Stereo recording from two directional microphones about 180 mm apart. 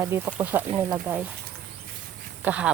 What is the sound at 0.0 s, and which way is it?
Speech, 10° right (ahead or behind).